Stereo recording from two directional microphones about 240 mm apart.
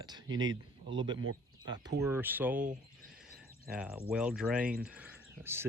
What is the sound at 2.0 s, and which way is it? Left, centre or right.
Speech, centre.